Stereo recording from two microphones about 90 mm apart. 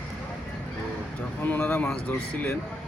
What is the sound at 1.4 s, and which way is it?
Speech, 20° left (ahead or behind).